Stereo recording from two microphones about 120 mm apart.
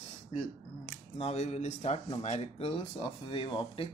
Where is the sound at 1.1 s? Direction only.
60° left (ahead or behind).